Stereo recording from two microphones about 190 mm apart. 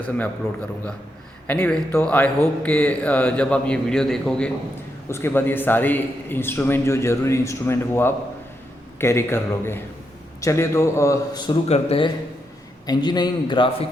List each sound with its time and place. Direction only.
1.5 s a man's voice: 5° left (ahead or behind); by 13.8 s 25° left (ahead or behind)